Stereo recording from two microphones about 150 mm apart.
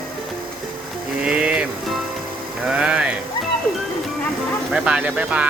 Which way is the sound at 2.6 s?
5° right (ahead or behind).